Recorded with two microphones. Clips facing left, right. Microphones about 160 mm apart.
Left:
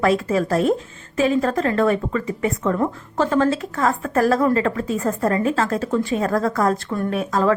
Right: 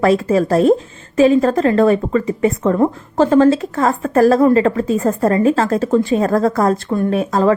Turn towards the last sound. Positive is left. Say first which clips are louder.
# right 5 dB
turn(degrees=-30)  # may be behind; listen again after turning